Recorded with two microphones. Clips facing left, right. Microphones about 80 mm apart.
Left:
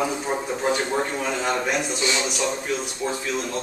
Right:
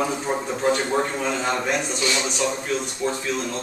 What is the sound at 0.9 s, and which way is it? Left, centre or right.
A man's voice, centre.